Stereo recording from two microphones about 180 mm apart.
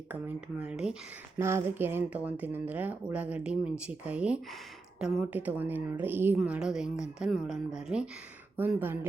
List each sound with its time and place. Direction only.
0.1 s a woman's voice: 5° right (ahead or behind)